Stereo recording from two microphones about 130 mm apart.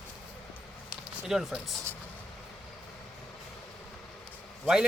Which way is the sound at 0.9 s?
Centre (ahead or behind).